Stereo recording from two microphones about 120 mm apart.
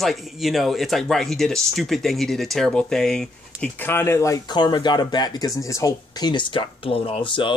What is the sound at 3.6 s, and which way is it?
Speech, 15° left (ahead or behind).